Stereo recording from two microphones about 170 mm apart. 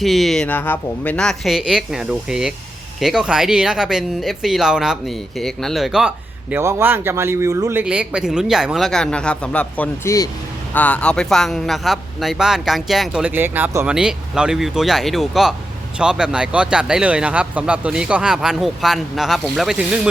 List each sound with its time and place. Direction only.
0.0 s speech: centre (ahead or behind)